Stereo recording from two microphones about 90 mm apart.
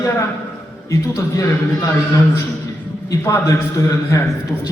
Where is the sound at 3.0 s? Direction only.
35° left (ahead or behind).